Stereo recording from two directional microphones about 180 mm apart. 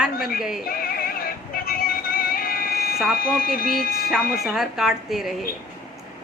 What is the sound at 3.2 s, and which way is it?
Speech, 50° left (ahead or behind).